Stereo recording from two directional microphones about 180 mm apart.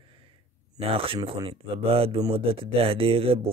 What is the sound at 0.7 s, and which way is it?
Speech, 30° right (ahead or behind).